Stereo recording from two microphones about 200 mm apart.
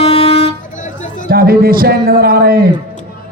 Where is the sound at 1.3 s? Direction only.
45° right (ahead or behind).